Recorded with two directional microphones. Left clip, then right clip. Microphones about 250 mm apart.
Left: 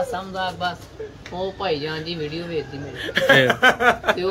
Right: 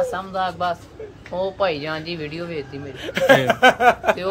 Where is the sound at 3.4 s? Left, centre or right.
Right.